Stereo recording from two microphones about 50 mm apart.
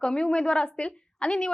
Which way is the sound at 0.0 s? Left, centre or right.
Centre.